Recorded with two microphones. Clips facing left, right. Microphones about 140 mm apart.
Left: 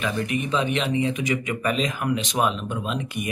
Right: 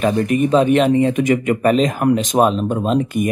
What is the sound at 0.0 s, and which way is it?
Speech, 45° right (ahead or behind).